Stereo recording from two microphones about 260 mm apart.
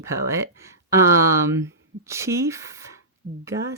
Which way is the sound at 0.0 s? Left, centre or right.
Centre.